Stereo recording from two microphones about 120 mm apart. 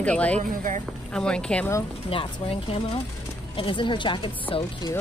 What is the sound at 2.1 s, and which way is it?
Speech, 50° left (ahead or behind).